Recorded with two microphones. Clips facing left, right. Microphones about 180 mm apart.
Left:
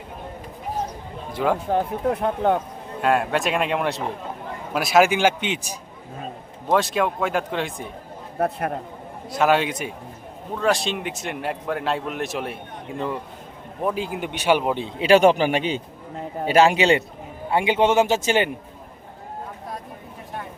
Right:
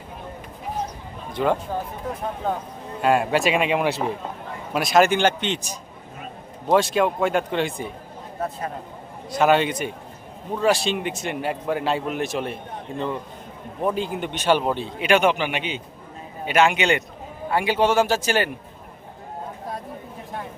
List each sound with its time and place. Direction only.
1.3 s speech: 5° left (ahead or behind)
1.7 s speech: 65° left (ahead or behind)
3.0 s a man's voice: centre (ahead or behind)
8.4 s a man's voice: 65° left (ahead or behind)
9.3 s a man's voice: centre (ahead or behind); by 18.5 s 20° left (ahead or behind)